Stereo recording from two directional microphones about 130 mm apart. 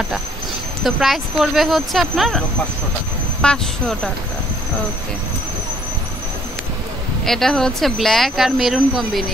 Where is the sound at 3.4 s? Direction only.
5° left (ahead or behind).